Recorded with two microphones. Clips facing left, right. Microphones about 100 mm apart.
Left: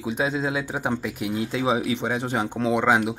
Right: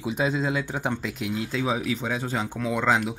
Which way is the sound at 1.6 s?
20° left (ahead or behind).